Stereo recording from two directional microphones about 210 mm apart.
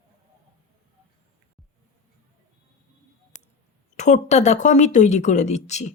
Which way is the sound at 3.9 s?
35° left (ahead or behind).